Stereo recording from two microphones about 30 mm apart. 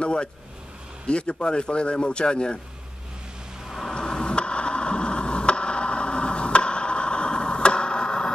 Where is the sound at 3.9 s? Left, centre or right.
Left.